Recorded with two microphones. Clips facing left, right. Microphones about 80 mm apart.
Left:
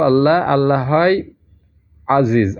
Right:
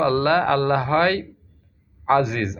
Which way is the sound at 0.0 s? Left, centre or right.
Left.